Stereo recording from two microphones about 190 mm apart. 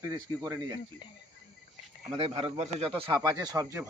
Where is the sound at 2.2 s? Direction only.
30° right (ahead or behind).